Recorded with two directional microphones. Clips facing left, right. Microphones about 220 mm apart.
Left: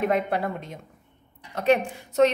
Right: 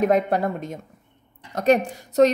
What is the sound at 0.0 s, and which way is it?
A woman's voice, 45° right (ahead or behind).